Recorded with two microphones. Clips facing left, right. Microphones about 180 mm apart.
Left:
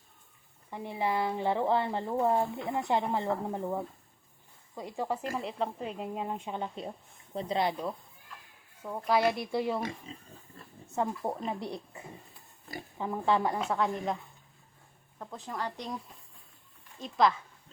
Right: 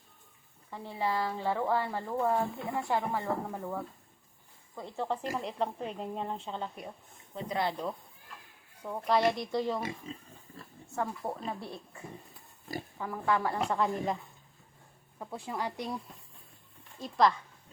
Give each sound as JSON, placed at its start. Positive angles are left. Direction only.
{"t": 0.7, "sound": "a woman's voice", "side_deg": 15}
{"t": 8.8, "sound": "speech", "side_deg": 5}
{"t": 10.8, "sound": "speech", "side_deg": 20}
{"t": 13.7, "sound": "speech", "side_deg": 0}
{"t": 15.2, "sound": "speech", "side_deg": -10}
{"t": 17.0, "sound": "speech", "side_deg": 0}